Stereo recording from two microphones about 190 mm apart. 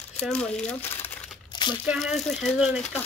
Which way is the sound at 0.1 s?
5° left (ahead or behind).